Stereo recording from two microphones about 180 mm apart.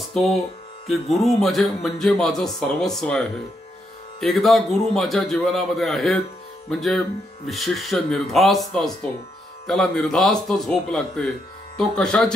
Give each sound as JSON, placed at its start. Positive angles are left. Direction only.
{"t": 0.0, "sound": "music", "side_deg": 0}
{"t": 0.8, "sound": "speech", "side_deg": 0}